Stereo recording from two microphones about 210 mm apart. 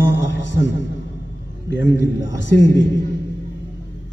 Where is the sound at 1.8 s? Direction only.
60° left (ahead or behind).